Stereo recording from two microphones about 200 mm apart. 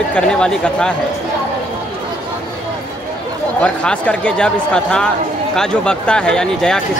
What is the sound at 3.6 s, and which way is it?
Speech, 5° left (ahead or behind).